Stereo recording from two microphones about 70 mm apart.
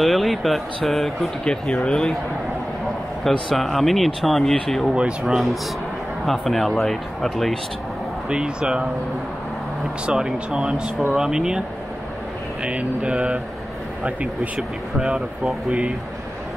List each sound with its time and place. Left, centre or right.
0.0 s speech: centre
3.3 s speech: centre
8.3 s speech: centre
10.0 s speech: centre
12.6 s speech: centre